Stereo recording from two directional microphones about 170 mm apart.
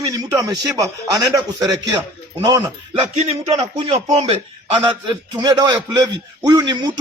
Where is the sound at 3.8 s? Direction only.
40° right (ahead or behind).